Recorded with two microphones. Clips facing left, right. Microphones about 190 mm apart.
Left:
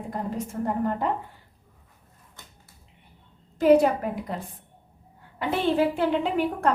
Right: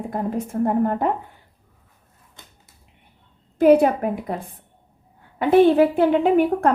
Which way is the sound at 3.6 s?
55° right (ahead or behind).